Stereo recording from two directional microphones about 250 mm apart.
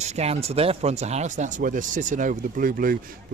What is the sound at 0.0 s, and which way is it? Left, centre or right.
Speech, right.